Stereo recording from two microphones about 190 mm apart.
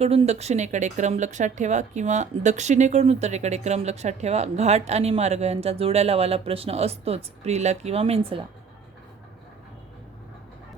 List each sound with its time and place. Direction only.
0.0 s speech: 35° right (ahead or behind)